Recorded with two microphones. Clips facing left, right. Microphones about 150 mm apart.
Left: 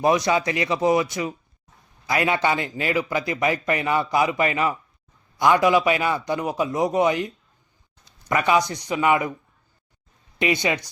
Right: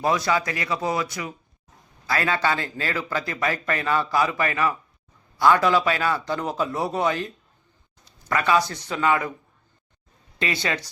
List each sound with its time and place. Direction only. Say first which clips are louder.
0.0 s a man's voice: left 3 dB; 20° left (ahead or behind)
10.3 s a man's voice: left 4 dB; 15° left (ahead or behind)